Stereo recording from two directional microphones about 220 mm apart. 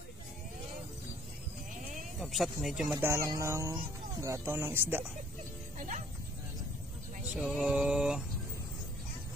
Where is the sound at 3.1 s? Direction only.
15° right (ahead or behind).